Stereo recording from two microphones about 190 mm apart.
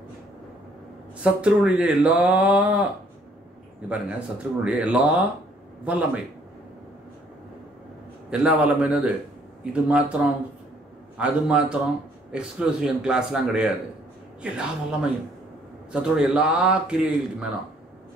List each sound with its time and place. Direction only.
1.2 s speech: 5° right (ahead or behind)
3.9 s speech: 5° right (ahead or behind)
8.3 s a man's voice: 5° right (ahead or behind)
11.1 s a man's voice: 5° right (ahead or behind)